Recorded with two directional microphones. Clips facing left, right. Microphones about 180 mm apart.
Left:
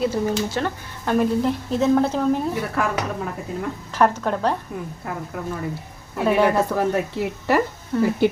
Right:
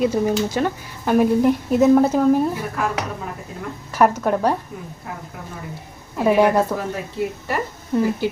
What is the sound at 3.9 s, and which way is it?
Speech, 10° right (ahead or behind).